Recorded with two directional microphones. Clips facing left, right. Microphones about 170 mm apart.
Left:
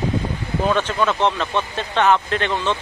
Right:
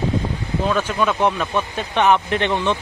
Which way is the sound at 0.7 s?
10° right (ahead or behind).